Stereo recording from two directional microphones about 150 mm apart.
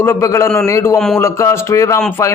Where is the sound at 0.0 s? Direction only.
20° left (ahead or behind).